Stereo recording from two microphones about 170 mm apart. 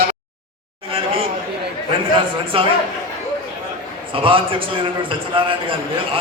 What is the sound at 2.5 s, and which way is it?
Speech, 30° right (ahead or behind).